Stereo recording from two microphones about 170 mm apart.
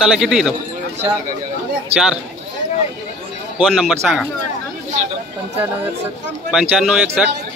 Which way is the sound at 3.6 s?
Centre (ahead or behind).